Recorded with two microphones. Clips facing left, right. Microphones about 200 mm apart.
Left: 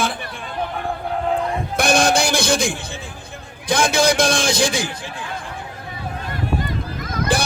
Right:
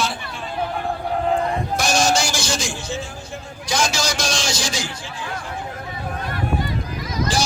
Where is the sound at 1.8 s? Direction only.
55° left (ahead or behind).